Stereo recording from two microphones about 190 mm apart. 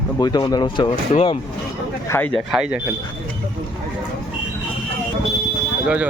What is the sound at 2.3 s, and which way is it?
Speech, centre (ahead or behind).